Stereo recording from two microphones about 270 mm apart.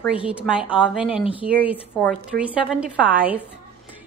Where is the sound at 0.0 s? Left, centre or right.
Centre.